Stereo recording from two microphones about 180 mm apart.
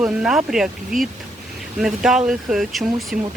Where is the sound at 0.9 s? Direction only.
50° right (ahead or behind).